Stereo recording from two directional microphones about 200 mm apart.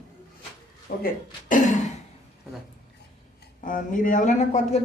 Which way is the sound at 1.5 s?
40° left (ahead or behind).